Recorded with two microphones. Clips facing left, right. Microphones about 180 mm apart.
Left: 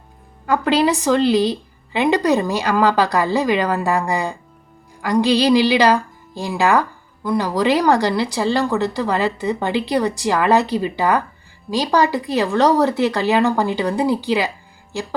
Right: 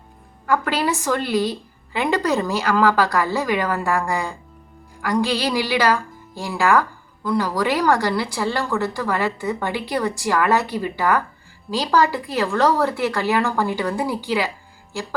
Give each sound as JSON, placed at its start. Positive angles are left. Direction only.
{"t": 0.4, "sound": "a woman's voice", "side_deg": 20}